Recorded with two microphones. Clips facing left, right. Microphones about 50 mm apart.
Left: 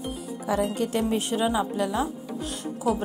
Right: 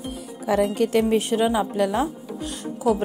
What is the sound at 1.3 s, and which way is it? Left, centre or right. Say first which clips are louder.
Speech: right 4 dB; centre.